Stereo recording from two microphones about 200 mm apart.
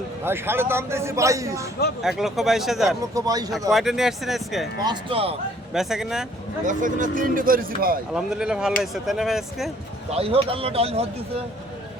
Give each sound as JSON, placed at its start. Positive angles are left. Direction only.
{"t": 0.3, "sound": "a man's voice", "side_deg": -10}
{"t": 2.0, "sound": "speech", "side_deg": 0}
{"t": 3.2, "sound": "speech", "side_deg": -20}
{"t": 3.7, "sound": "speech", "side_deg": 0}
{"t": 4.8, "sound": "speech", "side_deg": -25}
{"t": 5.7, "sound": "speech", "side_deg": 0}
{"t": 6.7, "sound": "speech", "side_deg": -40}
{"t": 8.1, "sound": "speech", "side_deg": -5}
{"t": 10.1, "sound": "speech", "side_deg": -30}